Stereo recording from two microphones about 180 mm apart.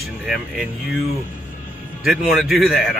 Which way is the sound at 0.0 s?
Centre (ahead or behind).